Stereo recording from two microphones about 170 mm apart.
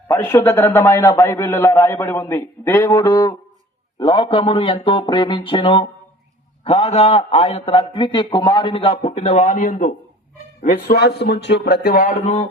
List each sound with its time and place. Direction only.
0.3 s a man's voice: 15° left (ahead or behind); by 9.9 s 50° left (ahead or behind)
10.6 s speech: 60° left (ahead or behind)